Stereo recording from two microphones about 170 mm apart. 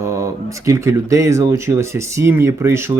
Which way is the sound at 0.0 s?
15° right (ahead or behind).